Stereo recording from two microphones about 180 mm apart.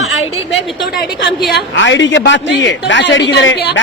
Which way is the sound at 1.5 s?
90° left.